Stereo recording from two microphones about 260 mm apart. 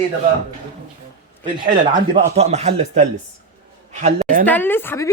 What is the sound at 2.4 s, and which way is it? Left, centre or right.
Speech, right.